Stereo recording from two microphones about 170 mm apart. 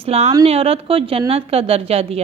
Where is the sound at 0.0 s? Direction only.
35° right (ahead or behind).